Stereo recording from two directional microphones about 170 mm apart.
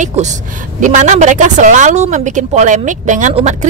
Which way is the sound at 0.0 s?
45° right (ahead or behind).